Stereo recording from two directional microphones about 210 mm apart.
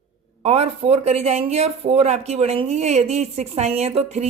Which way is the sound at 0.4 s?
30° right (ahead or behind).